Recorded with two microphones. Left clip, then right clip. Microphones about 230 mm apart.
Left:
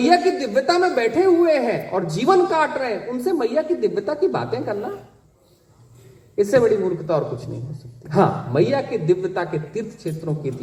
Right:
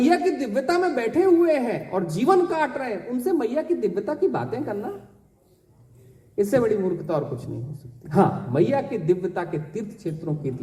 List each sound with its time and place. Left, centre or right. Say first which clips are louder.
0.0 s a man's voice: left 4 dB; right
6.3 s a man's voice: left 5 dB; right